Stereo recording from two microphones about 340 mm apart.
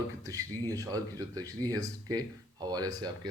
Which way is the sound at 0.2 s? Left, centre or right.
Centre.